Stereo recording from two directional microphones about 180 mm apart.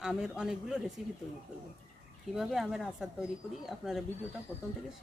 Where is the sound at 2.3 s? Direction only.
Centre (ahead or behind).